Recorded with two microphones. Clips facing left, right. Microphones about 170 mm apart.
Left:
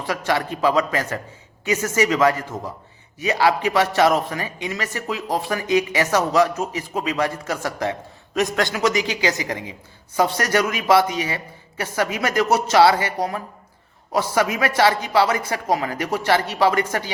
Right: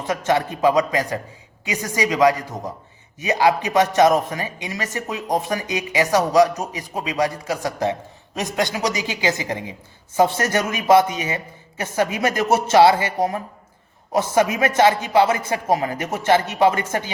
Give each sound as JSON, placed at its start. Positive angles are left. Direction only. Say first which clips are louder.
{"t": 0.0, "sound": "a man's voice", "louder": "right 2 dB", "side_deg": -20}